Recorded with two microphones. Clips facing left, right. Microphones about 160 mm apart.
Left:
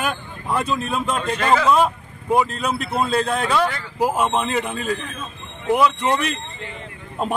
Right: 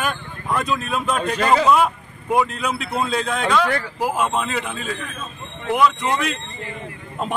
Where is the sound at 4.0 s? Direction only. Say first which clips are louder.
Left 4 dB; 35° left (ahead or behind).